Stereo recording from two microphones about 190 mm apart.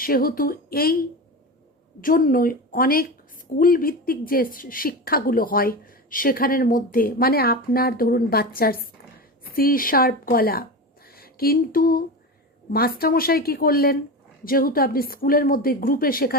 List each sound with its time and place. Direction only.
0.0 s a woman's voice: 50° left (ahead or behind)